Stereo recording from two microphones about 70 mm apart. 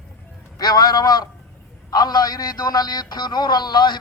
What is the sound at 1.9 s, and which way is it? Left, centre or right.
A man's voice, left.